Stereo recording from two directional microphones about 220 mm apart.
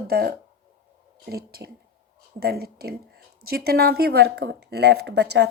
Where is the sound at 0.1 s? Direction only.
45° right (ahead or behind).